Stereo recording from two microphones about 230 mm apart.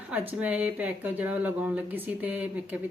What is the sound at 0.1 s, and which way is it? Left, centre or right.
Speech, centre.